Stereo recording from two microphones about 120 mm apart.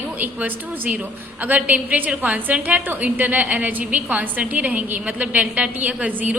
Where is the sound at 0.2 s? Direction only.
15° right (ahead or behind).